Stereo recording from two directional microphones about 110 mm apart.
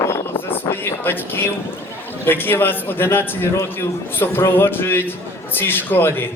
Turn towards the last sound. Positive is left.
turn(degrees=20)  # may be behind; listen again after turning